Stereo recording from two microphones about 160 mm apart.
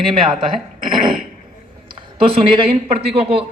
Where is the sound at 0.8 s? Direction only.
30° right (ahead or behind).